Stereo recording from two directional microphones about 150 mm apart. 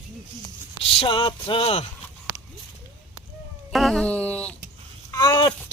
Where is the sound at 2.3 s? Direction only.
10° right (ahead or behind).